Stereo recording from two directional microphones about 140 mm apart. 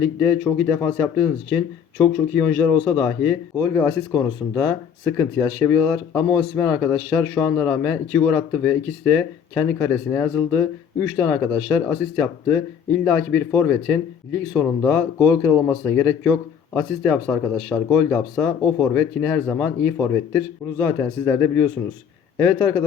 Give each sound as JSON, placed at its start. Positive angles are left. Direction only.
{"t": 0.2, "sound": "speech", "side_deg": 10}
{"t": 4.5, "sound": "a man's voice", "side_deg": 25}
{"t": 15.4, "sound": "speech", "side_deg": 10}